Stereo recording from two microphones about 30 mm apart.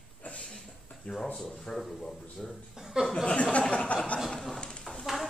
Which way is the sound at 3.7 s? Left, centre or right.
Left.